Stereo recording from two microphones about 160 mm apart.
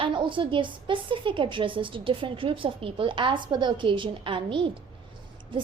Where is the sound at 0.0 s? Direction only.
30° right (ahead or behind).